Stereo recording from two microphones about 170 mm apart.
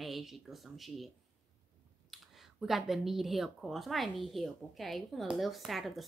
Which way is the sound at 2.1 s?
Centre (ahead or behind).